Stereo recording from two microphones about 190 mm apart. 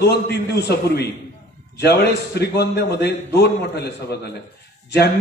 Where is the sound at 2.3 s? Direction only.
60° left (ahead or behind).